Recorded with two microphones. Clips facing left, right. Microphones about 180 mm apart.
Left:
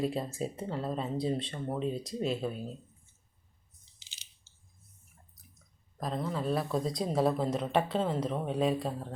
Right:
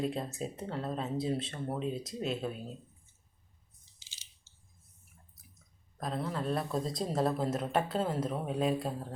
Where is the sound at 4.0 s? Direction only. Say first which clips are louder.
Left 2 dB; 60° left (ahead or behind).